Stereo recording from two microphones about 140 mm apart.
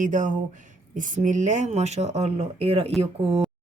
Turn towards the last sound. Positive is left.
turn(degrees=-45)  # may be behind; listen again after turning